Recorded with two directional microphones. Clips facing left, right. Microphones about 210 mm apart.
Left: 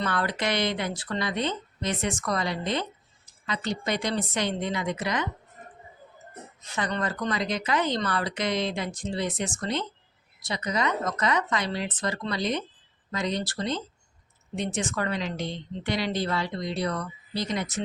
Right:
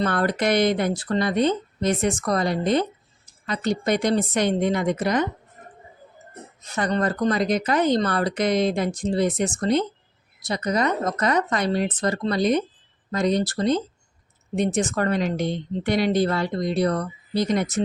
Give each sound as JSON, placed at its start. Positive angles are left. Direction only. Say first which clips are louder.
{"t": 0.0, "sound": "speech", "louder": "right 6 dB", "side_deg": -45}
{"t": 6.7, "sound": "speech", "louder": "right 6 dB", "side_deg": -40}